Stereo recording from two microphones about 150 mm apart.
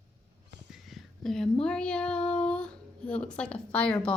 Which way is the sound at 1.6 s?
5° left (ahead or behind).